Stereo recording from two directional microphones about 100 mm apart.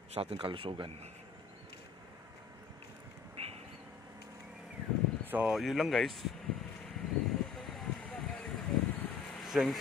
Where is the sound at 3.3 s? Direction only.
90° right.